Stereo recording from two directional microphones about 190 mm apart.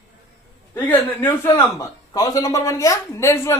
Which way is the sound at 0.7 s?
10° left (ahead or behind).